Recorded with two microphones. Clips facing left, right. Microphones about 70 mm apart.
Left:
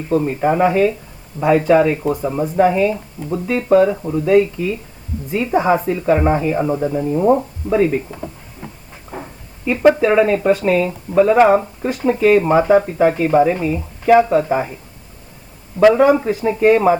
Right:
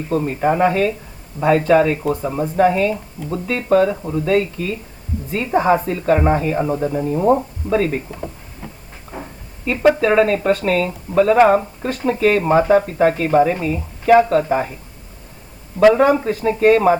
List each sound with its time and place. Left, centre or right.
0.1 s speech: centre
9.9 s speech: centre
16.0 s speech: centre